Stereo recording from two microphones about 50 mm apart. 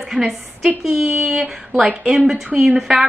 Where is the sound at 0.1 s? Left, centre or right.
Centre.